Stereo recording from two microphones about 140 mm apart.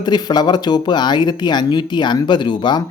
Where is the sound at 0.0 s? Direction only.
30° left (ahead or behind).